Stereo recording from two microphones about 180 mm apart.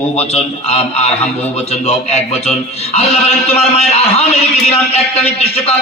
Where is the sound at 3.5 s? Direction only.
35° left (ahead or behind).